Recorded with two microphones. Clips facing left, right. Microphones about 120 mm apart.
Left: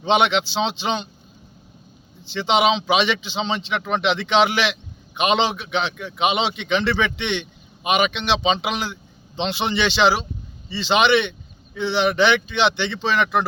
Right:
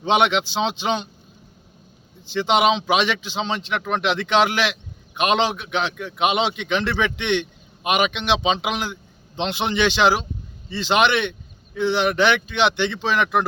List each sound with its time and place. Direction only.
0.0 s a man's voice: 5° right (ahead or behind)
2.3 s a man's voice: 10° right (ahead or behind)